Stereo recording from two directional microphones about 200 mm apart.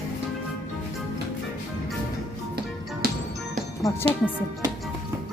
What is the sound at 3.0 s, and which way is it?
Music, 50° right (ahead or behind).